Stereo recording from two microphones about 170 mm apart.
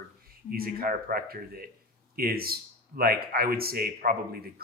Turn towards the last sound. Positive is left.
turn(degrees=-65)  # may be behind; listen again after turning